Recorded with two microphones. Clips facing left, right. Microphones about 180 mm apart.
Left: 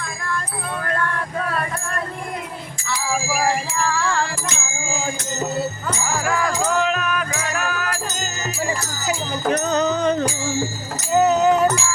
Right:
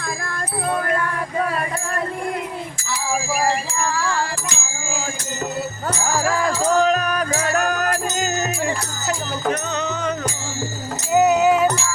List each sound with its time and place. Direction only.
3.8 s music: 5° right (ahead or behind)
6.2 s music: 30° right (ahead or behind); by 8.4 s 45° right (ahead or behind)
9.5 s music: 35° left (ahead or behind)
11.1 s speech: 10° right (ahead or behind)